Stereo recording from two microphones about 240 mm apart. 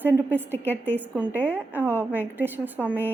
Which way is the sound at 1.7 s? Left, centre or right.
Centre.